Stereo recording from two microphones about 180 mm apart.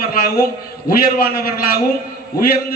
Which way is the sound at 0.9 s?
55° left (ahead or behind).